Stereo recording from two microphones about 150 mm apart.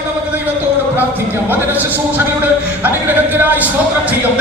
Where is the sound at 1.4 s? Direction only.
15° right (ahead or behind).